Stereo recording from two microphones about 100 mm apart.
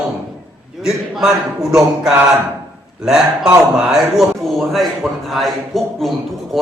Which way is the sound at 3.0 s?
5° right (ahead or behind).